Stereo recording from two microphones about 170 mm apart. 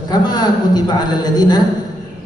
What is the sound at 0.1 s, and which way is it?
A man's voice, 25° left (ahead or behind).